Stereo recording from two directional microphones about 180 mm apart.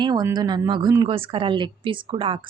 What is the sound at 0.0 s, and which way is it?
A woman's voice, 25° right (ahead or behind).